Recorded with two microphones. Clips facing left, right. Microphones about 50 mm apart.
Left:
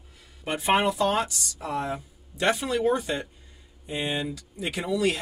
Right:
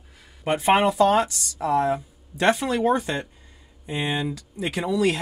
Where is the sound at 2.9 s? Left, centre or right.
Right.